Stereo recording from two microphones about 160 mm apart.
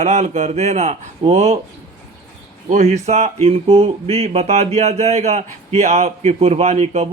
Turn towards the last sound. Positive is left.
turn(degrees=-45)  # may be behind; listen again after turning